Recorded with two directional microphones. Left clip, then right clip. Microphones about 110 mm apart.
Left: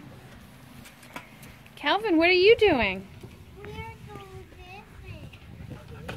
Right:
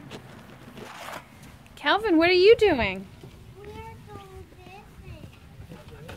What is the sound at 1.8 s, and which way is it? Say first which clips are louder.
A woman's voice: right 2 dB; 15° right (ahead or behind).